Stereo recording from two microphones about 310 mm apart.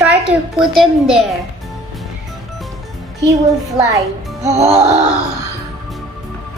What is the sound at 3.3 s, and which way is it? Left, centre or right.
Speech, centre.